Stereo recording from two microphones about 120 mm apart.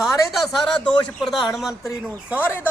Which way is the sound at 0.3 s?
Centre (ahead or behind).